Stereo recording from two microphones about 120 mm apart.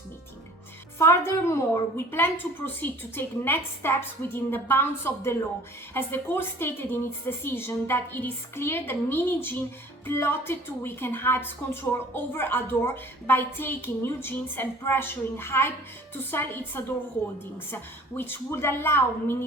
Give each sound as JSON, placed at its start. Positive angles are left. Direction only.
{"t": 0.9, "sound": "a woman's voice", "side_deg": 25}
{"t": 18.2, "sound": "a woman's voice", "side_deg": 20}